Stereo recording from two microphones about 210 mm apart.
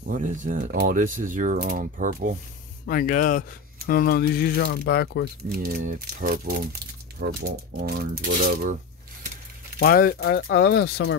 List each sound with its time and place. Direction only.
0.0 s speech: 40° right (ahead or behind)
2.9 s speech: 45° left (ahead or behind)
5.6 s speech: 45° right (ahead or behind)
9.8 s speech: 45° left (ahead or behind)